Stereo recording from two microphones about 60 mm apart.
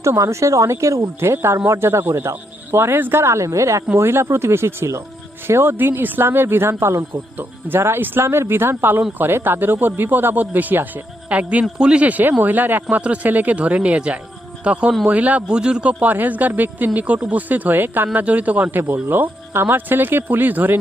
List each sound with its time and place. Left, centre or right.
0.0 s speech: right
3.9 s a man's voice: right
19.0 s a man's voice: right